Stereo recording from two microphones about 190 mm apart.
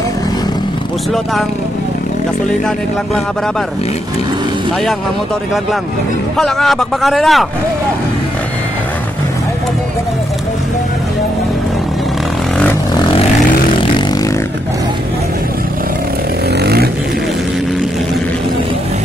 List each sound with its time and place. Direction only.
6.3 s a man's voice: centre (ahead or behind)
16.6 s vehicle: 55° right (ahead or behind)